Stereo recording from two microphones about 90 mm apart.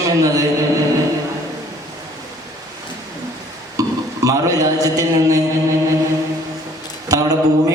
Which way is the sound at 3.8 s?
40° right (ahead or behind).